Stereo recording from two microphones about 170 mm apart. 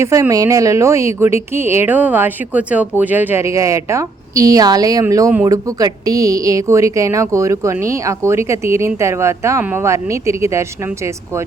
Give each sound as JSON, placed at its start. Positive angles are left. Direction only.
{"t": 0.0, "sound": "a woman's voice", "side_deg": -20}